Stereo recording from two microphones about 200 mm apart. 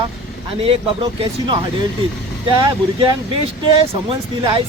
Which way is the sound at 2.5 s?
25° right (ahead or behind).